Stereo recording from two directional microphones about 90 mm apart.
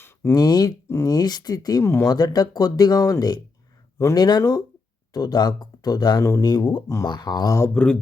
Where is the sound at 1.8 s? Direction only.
30° left (ahead or behind).